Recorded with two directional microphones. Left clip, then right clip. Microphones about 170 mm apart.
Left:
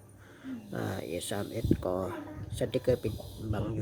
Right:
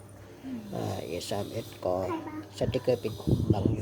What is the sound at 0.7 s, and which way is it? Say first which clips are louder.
Speech: right 1 dB; 30° left (ahead or behind).